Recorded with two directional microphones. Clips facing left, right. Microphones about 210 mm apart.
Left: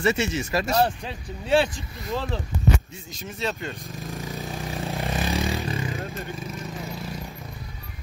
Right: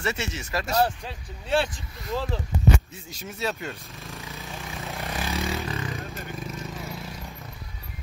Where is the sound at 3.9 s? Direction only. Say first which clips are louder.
Left 6 dB; 45° left (ahead or behind); by 5.4 s 30° left (ahead or behind).